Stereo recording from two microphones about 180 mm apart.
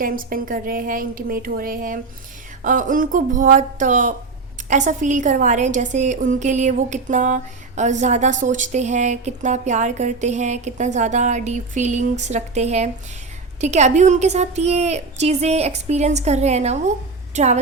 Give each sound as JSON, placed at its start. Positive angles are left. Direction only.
{"t": 0.0, "sound": "a woman's voice", "side_deg": -50}